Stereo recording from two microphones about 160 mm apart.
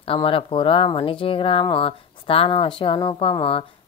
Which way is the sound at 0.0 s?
35° left (ahead or behind).